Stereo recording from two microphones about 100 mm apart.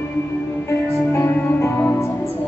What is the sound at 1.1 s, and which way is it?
Music, 25° left (ahead or behind).